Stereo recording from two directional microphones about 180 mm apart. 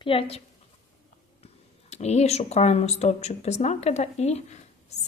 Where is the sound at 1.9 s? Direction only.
40° left (ahead or behind).